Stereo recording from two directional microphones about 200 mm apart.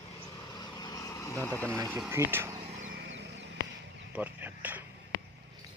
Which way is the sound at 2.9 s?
55° right (ahead or behind).